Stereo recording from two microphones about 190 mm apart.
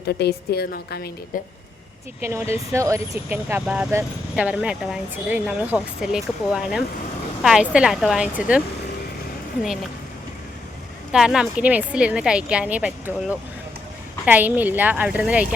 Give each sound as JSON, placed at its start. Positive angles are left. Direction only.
{"t": 0.2, "sound": "a woman's voice", "side_deg": 55}
{"t": 2.2, "sound": "a woman's voice", "side_deg": -15}
{"t": 11.1, "sound": "a woman's voice", "side_deg": -5}